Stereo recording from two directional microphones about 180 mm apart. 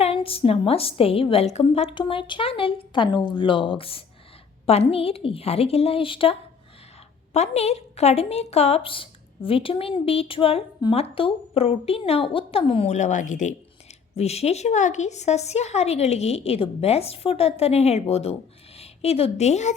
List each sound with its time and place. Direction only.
0.0 s a woman's voice: 30° left (ahead or behind)
7.3 s a woman's voice: 35° left (ahead or behind)